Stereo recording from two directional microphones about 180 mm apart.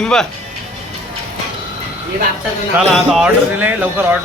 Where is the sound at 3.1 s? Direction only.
5° right (ahead or behind).